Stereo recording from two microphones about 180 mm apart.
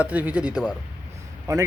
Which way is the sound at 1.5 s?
20° right (ahead or behind).